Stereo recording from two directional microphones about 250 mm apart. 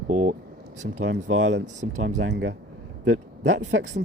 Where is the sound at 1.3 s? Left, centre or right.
Right.